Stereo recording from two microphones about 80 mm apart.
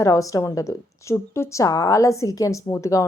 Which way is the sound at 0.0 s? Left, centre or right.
Left.